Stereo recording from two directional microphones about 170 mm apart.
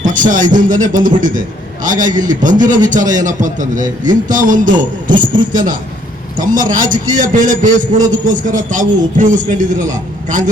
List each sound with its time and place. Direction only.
0.0 s a man's voice: 50° right (ahead or behind)